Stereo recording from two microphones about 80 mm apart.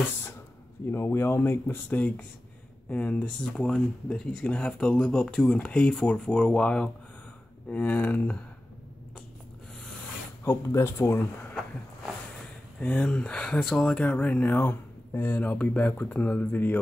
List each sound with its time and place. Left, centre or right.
0.9 s speech: left
10.4 s speech: left
12.8 s speech: centre